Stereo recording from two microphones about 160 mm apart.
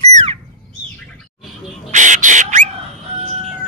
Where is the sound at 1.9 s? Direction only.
50° right (ahead or behind).